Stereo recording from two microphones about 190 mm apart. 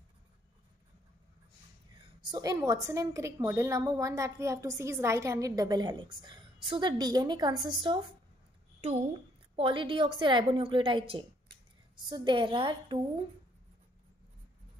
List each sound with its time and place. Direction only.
2.0 s a woman's voice: 25° right (ahead or behind)
8.8 s a woman's voice: 40° right (ahead or behind)
9.6 s a woman's voice: 25° right (ahead or behind)